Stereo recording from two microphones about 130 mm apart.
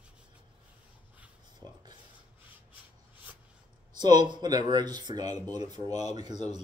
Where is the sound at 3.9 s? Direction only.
35° right (ahead or behind).